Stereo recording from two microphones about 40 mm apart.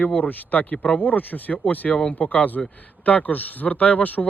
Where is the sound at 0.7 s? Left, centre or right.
Left.